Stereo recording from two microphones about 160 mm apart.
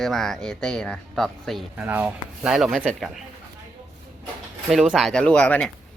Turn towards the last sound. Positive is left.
turn(degrees=5)  # may be behind; listen again after turning